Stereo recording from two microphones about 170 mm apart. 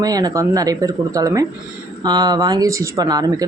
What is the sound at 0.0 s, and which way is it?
Speech, 20° right (ahead or behind).